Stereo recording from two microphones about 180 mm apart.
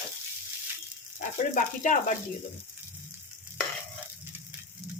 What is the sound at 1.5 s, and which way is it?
Speech, 45° left (ahead or behind).